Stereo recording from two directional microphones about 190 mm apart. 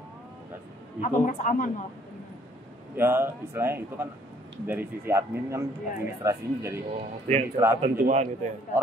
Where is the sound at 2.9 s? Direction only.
10° right (ahead or behind).